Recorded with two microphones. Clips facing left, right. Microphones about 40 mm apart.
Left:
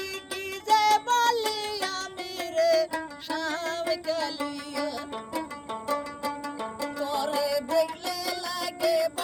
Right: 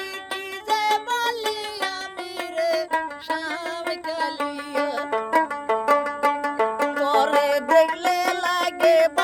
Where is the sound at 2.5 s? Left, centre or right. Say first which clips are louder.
Even; centre.